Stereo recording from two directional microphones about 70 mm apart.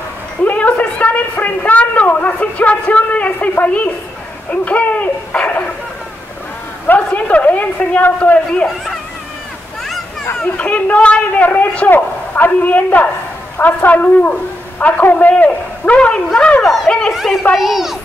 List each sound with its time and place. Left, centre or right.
0.4 s a man's voice: left
7.1 s a man's voice: centre
8.5 s speech: centre
10.4 s a man's voice: centre
16.6 s speech: centre
17.1 s speech: centre